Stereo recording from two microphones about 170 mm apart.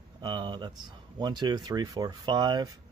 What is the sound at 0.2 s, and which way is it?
Speech, 25° right (ahead or behind).